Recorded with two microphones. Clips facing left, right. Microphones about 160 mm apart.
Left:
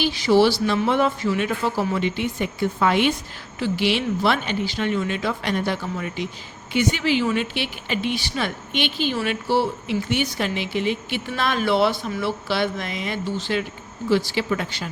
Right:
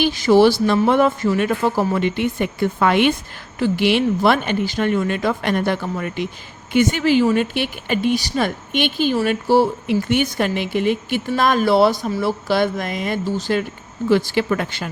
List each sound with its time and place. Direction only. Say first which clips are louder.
0.0 s speech: right 4 dB; 50° right (ahead or behind)